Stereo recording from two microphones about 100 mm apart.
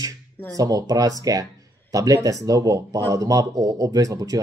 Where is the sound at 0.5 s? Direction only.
35° right (ahead or behind).